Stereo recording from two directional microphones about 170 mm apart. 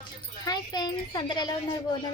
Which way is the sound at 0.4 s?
25° left (ahead or behind).